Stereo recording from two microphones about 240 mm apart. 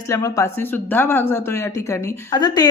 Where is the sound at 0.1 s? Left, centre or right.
Centre.